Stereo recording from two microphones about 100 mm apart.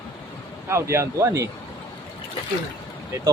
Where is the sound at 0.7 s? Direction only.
30° right (ahead or behind).